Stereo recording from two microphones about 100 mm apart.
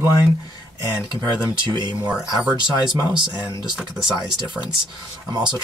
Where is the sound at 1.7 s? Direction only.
45° right (ahead or behind).